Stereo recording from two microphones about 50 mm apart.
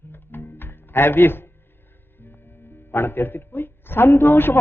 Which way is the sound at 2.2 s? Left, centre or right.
Left.